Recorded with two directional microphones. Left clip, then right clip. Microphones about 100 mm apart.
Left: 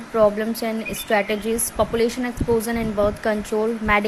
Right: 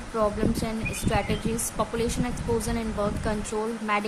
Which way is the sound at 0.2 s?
50° left (ahead or behind).